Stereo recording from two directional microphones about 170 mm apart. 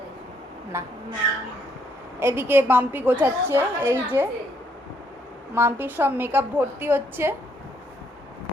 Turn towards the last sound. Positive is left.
turn(degrees=-10)  # may be behind; listen again after turning